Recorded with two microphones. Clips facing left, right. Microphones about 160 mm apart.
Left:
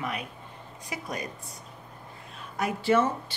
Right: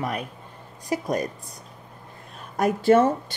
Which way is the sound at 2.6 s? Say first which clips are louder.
Right 7 dB; 45° right (ahead or behind).